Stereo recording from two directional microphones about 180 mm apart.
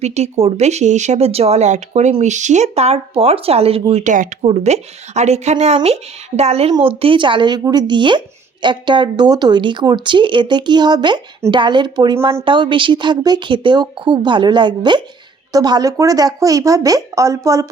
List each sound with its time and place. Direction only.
0.0 s speech: 40° right (ahead or behind); by 17.7 s 15° right (ahead or behind)